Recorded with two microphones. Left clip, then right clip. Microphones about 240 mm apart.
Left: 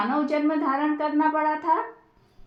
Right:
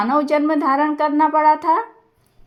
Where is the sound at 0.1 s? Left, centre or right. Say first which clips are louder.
Right 7 dB; right.